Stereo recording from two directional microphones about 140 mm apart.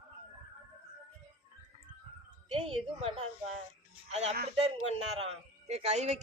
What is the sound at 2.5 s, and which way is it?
A man's voice, 45° right (ahead or behind).